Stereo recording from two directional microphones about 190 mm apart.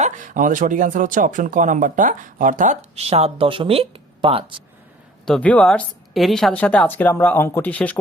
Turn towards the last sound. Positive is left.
turn(degrees=10)  # may be behind; listen again after turning